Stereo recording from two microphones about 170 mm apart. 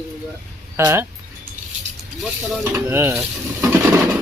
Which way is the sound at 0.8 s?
10° right (ahead or behind).